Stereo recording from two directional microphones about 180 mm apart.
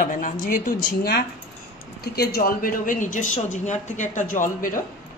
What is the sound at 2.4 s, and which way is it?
Speech, 50° left (ahead or behind).